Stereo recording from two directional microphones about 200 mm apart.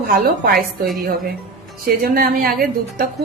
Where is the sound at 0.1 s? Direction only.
45° right (ahead or behind).